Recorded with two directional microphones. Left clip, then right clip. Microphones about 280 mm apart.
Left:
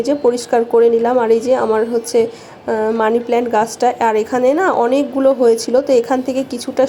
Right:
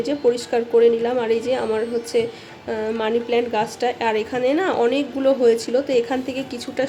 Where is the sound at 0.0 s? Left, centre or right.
Centre.